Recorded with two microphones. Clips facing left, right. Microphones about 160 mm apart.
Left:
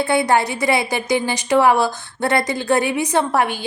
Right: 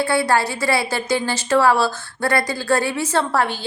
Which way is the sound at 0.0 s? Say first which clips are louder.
Left 2 dB; 20° left (ahead or behind).